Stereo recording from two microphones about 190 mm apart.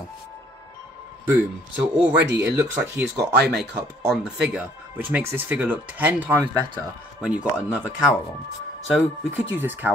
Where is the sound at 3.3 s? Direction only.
60° right (ahead or behind).